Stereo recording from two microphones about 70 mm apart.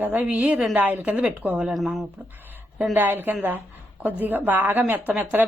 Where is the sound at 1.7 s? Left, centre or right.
Centre.